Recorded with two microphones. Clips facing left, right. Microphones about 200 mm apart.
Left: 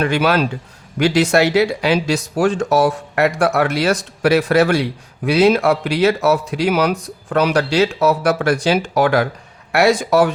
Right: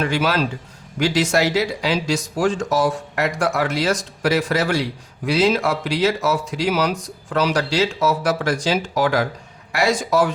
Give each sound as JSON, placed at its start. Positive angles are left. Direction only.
{"t": 0.0, "sound": "speech", "side_deg": 60}